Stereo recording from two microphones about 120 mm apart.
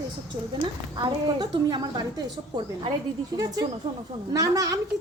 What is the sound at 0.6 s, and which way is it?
A woman's voice, 35° right (ahead or behind).